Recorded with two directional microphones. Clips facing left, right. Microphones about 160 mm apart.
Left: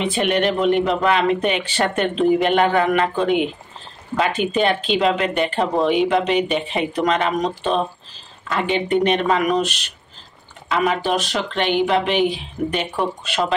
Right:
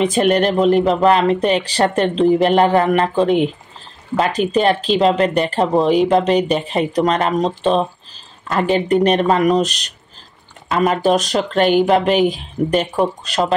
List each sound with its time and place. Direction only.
0.0 s speech: 40° right (ahead or behind)